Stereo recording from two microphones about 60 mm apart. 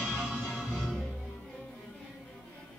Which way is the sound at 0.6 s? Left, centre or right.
Centre.